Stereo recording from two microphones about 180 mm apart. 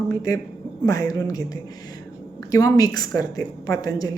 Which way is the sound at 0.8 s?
20° left (ahead or behind).